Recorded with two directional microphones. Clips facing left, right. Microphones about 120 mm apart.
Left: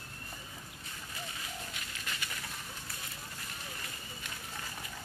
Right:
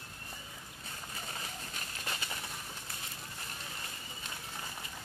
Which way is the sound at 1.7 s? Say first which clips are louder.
Right 2 dB; 35° right (ahead or behind).